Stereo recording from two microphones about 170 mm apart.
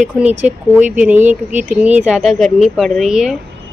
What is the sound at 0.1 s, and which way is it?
A woman's voice, 10° right (ahead or behind).